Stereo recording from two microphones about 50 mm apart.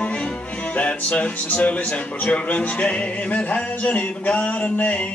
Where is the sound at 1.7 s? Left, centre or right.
Left.